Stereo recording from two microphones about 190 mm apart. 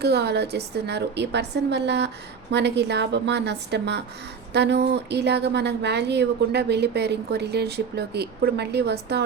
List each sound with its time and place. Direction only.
0.0 s speech: 60° right (ahead or behind)